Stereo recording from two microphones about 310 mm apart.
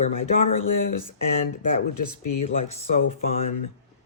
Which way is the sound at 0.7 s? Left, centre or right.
Left.